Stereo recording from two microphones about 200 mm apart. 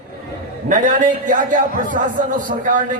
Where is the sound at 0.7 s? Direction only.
40° right (ahead or behind).